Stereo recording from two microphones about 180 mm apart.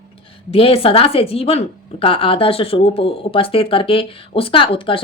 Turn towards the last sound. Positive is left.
turn(degrees=30)  # may be behind; listen again after turning